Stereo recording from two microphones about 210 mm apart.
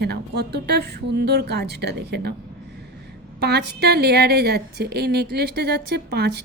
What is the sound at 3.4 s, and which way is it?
Speech, 50° right (ahead or behind).